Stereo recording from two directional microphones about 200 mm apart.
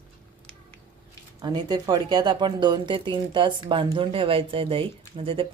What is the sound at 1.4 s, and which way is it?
Speech, 20° right (ahead or behind).